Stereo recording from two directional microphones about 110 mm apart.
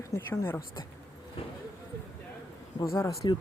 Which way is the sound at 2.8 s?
30° left (ahead or behind).